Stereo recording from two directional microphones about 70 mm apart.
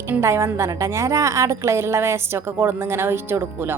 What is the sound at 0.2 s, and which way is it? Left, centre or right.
A woman's voice, right.